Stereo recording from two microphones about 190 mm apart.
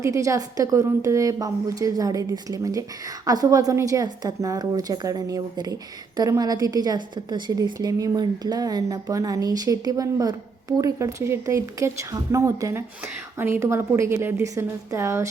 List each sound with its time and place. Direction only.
0.0 s a woman's voice: 15° right (ahead or behind)